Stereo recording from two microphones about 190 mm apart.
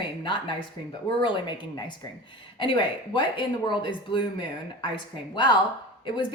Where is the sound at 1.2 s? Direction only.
25° left (ahead or behind).